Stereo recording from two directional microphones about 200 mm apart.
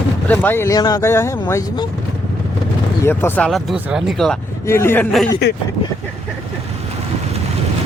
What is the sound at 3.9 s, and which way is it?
Speech, centre (ahead or behind).